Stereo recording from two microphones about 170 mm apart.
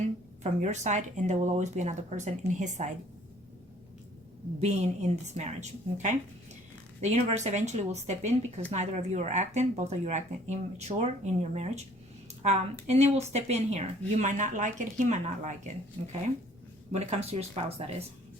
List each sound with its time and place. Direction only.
0.4 s speech: 45° right (ahead or behind)
4.6 s a woman's voice: 40° right (ahead or behind)
12.9 s a woman's voice: 40° right (ahead or behind)
16.9 s a woman's voice: 40° right (ahead or behind)